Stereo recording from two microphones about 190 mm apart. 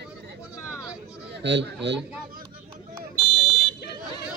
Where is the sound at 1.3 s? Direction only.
65° right (ahead or behind).